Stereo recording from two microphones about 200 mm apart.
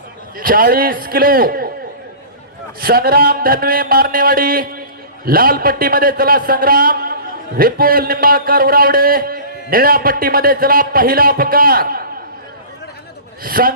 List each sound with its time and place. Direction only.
0.3 s a man's voice: 45° right (ahead or behind)
2.8 s a man's voice: 50° right (ahead or behind)
13.4 s a man's voice: 45° right (ahead or behind)